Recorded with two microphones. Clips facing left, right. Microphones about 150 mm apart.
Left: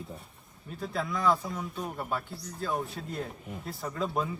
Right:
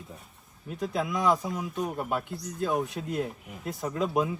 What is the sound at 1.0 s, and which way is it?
Speech, 15° right (ahead or behind).